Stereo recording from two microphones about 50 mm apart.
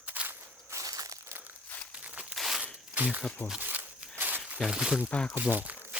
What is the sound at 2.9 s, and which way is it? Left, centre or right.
Speech, right.